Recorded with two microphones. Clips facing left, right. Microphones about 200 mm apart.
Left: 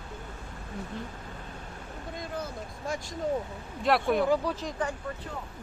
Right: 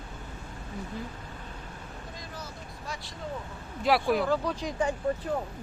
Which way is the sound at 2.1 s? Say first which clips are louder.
Left 10 dB; 55° left (ahead or behind).